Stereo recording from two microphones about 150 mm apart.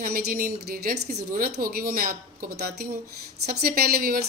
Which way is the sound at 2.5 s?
90° right.